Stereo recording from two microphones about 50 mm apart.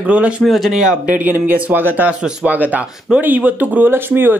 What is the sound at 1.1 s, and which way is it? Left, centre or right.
Speech, right.